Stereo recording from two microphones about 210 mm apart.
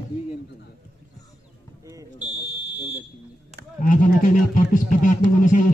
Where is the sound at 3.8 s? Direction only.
40° left (ahead or behind).